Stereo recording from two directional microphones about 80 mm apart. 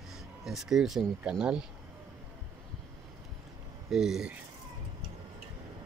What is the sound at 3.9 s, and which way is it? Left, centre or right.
Speech, centre.